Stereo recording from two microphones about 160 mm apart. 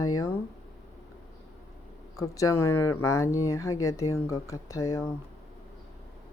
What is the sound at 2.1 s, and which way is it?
Speech, 20° left (ahead or behind).